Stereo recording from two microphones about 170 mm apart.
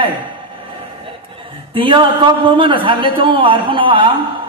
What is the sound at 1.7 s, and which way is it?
A man's voice, 30° right (ahead or behind).